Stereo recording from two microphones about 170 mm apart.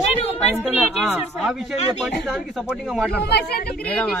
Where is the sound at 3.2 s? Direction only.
70° left (ahead or behind).